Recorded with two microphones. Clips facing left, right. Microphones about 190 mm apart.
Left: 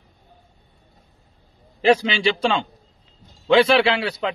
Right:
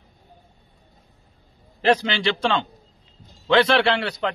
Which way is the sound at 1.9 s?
10° left (ahead or behind).